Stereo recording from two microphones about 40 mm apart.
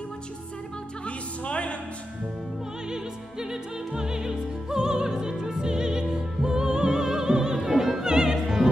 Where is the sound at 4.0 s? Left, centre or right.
Centre.